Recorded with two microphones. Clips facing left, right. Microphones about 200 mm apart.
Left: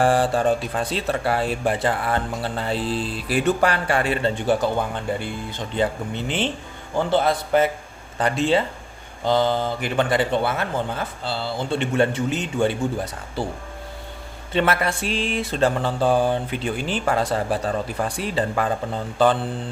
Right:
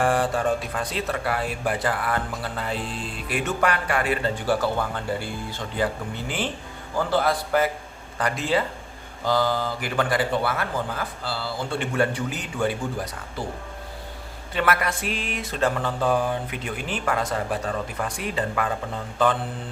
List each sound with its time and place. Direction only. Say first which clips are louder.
0.0 s speech: left 4 dB; 30° left (ahead or behind)
14.5 s mantra: left 3 dB; 25° left (ahead or behind)